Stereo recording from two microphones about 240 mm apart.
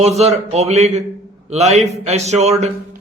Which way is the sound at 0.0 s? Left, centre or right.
Right.